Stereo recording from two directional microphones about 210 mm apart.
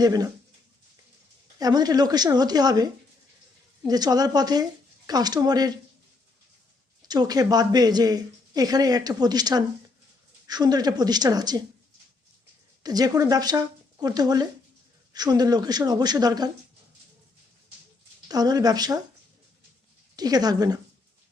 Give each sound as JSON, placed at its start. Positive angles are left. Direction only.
{"t": 0.0, "sound": "a woman's voice", "side_deg": -20}
{"t": 1.5, "sound": "speech", "side_deg": -20}
{"t": 7.1, "sound": "speech", "side_deg": -20}
{"t": 12.8, "sound": "a woman's voice", "side_deg": -20}
{"t": 18.3, "sound": "a woman's voice", "side_deg": -20}
{"t": 20.1, "sound": "a woman's voice", "side_deg": -20}